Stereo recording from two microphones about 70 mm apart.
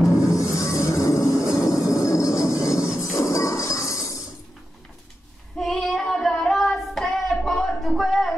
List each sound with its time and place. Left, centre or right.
0.2 s music: left
1.6 s train: left
3.2 s a sound: left
5.6 s child singing: centre